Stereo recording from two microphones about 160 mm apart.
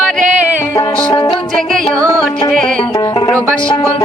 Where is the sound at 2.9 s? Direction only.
20° left (ahead or behind).